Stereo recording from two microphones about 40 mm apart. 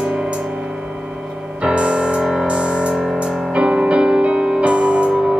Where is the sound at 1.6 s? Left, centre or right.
Right.